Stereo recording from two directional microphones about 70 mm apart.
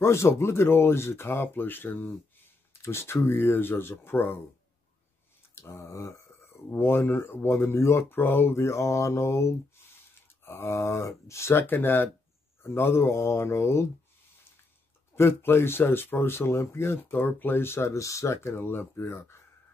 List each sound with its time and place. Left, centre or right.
0.0 s speech: left
5.5 s a sound: left
6.7 s speech: left
11.6 s speech: left
15.1 s speech: left